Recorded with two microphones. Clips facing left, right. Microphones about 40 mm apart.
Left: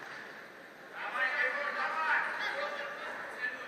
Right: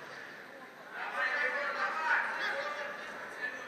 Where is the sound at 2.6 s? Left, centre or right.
Centre.